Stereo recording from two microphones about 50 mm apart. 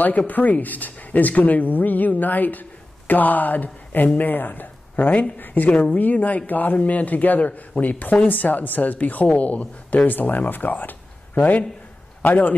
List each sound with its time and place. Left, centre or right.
0.3 s a man's voice: left